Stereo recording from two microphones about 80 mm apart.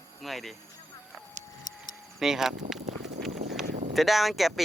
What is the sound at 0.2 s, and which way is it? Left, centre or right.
Speech, centre.